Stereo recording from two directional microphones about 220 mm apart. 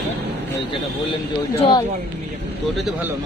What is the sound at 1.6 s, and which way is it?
Speech, 20° left (ahead or behind).